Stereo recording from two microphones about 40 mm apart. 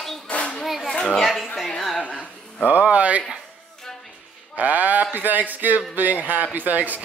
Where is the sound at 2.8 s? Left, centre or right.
Right.